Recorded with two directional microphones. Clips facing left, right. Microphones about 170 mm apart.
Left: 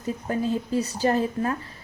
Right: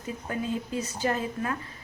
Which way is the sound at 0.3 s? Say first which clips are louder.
Left 5 dB; 35° left (ahead or behind).